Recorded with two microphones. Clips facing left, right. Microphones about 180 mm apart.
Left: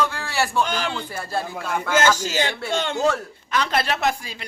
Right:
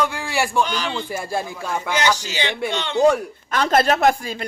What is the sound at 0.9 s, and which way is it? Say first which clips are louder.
Speech: right 3 dB; 15° right (ahead or behind).